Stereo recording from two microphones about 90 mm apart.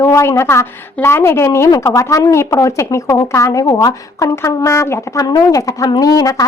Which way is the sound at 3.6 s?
45° left (ahead or behind).